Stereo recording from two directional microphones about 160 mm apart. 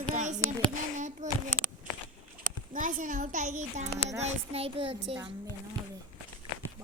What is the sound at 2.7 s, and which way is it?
A woman's voice, 55° right (ahead or behind).